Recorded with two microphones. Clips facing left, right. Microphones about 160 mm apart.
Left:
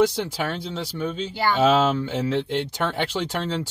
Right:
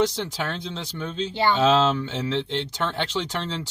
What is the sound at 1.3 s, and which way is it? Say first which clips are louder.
Speech: right 3 dB; 25° right (ahead or behind).